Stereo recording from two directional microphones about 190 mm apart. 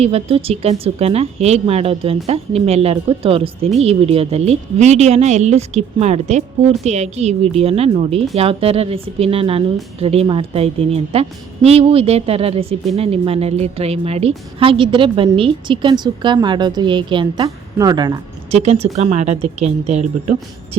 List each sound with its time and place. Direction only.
0.0 s a woman's voice: 30° right (ahead or behind)
18.5 s speech: 35° right (ahead or behind)